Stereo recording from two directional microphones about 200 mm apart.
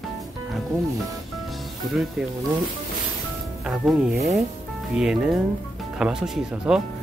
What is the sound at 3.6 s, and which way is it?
Speech, centre (ahead or behind).